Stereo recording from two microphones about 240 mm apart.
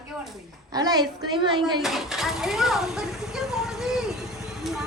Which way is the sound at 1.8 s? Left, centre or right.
Centre.